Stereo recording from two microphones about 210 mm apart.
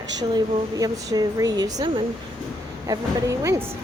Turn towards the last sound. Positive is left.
turn(degrees=-15)  # may be behind; listen again after turning